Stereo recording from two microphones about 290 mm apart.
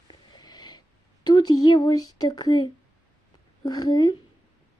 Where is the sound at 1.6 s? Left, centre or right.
Centre.